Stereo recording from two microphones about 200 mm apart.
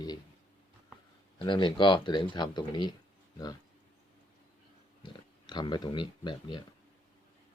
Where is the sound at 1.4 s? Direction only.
25° left (ahead or behind).